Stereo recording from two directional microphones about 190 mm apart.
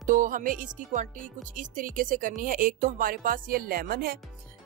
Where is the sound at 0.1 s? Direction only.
45° right (ahead or behind).